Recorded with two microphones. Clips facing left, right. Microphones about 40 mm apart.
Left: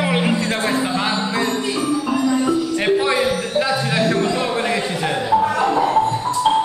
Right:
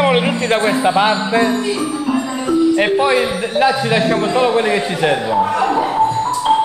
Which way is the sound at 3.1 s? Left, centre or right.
Right.